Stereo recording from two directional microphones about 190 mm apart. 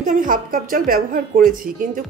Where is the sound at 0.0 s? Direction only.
45° right (ahead or behind).